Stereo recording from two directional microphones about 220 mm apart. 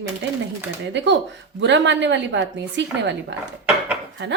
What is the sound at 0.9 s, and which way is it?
A woman's voice, 55° right (ahead or behind).